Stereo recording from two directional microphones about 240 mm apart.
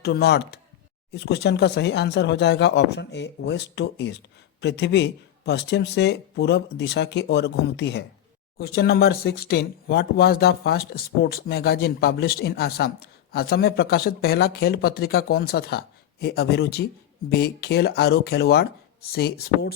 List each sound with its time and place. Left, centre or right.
0.0 s speech: left